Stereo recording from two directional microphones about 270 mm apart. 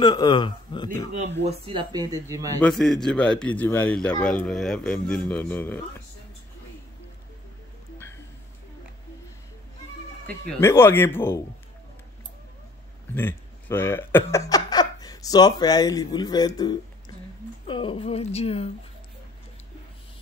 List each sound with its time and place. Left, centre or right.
0.0 s speech: centre
1.5 s speech: centre
2.6 s speech: centre
10.2 s speech: centre
13.1 s a woman's voice: centre